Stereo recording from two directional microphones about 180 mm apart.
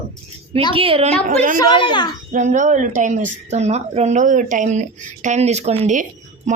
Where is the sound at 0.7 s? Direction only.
30° right (ahead or behind).